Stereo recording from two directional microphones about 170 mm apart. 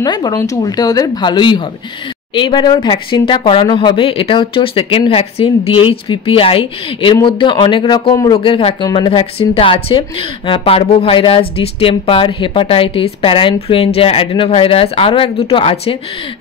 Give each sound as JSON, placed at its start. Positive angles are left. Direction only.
{"t": 0.0, "sound": "a woman's voice", "side_deg": 25}